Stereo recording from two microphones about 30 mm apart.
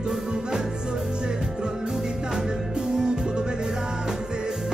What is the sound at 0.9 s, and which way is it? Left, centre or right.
Music, right.